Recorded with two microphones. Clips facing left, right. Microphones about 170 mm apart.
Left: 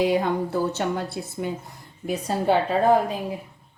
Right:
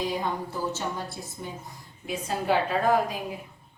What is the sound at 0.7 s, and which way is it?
Speech, 65° left (ahead or behind).